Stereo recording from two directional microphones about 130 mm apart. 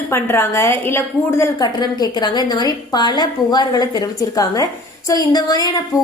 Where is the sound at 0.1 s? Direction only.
20° left (ahead or behind).